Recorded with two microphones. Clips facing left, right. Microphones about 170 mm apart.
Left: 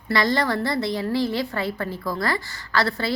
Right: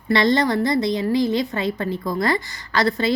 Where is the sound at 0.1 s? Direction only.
20° right (ahead or behind).